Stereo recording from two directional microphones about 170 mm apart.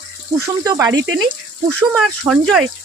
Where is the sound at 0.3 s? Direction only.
20° right (ahead or behind).